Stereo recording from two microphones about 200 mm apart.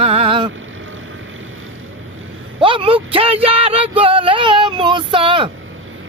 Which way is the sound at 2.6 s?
25° right (ahead or behind).